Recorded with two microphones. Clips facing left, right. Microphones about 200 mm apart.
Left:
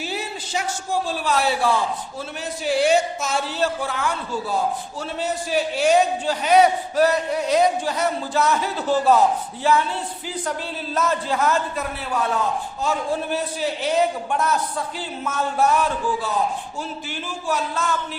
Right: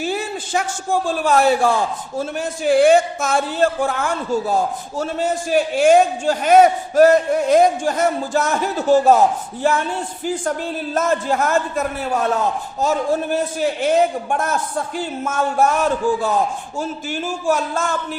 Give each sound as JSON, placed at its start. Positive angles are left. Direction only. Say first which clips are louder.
{"t": 0.0, "sound": "a man's voice", "louder": "right 6 dB", "side_deg": -50}